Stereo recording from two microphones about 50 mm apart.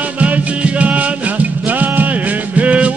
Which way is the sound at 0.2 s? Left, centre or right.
Right.